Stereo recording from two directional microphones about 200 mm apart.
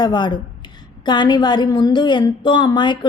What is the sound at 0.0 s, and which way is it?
A woman's voice, 20° left (ahead or behind).